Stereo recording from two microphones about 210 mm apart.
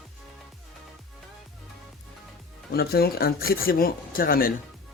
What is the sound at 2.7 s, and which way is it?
Speech, 50° left (ahead or behind).